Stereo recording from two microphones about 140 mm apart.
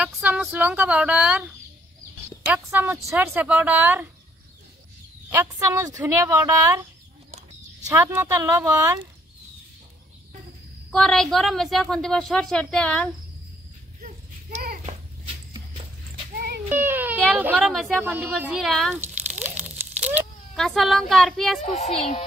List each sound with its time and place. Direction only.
0.0 s speech: 10° right (ahead or behind)
2.4 s speech: 15° right (ahead or behind)
5.3 s a woman's voice: 20° right (ahead or behind)
7.8 s a woman's voice: 15° right (ahead or behind)
10.9 s a woman's voice: 5° left (ahead or behind)
14.0 s a sound: 80° right
16.6 s speech: 15° right (ahead or behind)
17.7 s a woman's voice: centre (ahead or behind)
18.0 s speech: 15° right (ahead or behind)
18.4 s a woman's voice: 5° right (ahead or behind)
18.9 s a sound: 15° right (ahead or behind)
20.5 s a woman's voice: centre (ahead or behind)
21.6 s speech: 50° left (ahead or behind)